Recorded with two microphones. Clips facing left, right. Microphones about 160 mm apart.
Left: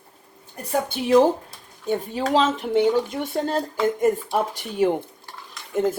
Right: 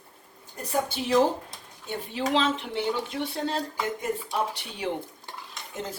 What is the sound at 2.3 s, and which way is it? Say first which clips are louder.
Speech: left 7 dB; 40° left (ahead or behind).